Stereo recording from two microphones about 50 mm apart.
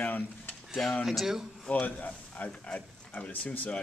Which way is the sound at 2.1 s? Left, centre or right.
Left.